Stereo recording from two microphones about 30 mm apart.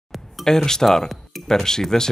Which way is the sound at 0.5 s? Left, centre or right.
Centre.